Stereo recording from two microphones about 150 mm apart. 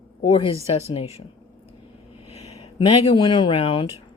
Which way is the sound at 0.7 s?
40° left (ahead or behind).